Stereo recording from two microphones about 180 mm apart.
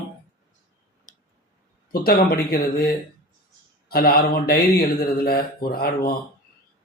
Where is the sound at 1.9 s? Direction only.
55° left (ahead or behind).